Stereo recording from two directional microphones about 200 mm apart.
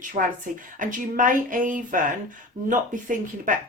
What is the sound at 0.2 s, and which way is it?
Speech, 40° right (ahead or behind).